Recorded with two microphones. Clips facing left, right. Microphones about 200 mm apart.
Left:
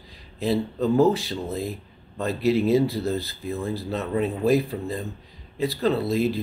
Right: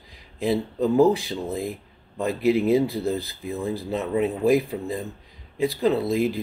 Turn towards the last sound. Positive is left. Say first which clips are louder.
# right 1 dB
turn(degrees=-15)  # may be behind; listen again after turning